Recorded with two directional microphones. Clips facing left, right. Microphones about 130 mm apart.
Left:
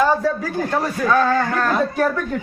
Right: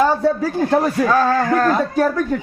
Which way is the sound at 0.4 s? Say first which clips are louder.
Right 5 dB; 35° right (ahead or behind).